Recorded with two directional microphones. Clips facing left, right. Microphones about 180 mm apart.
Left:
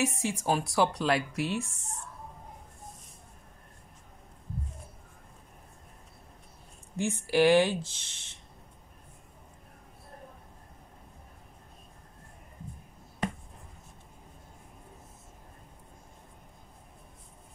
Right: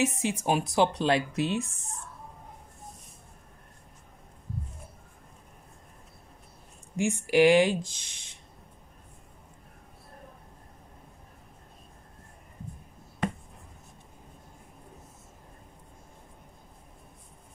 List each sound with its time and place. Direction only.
0.0 s speech: 20° right (ahead or behind)
7.0 s speech: 15° right (ahead or behind)